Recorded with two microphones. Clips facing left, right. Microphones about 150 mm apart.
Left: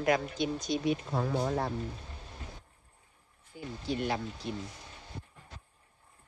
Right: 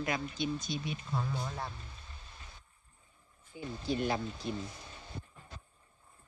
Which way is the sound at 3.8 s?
35° right (ahead or behind).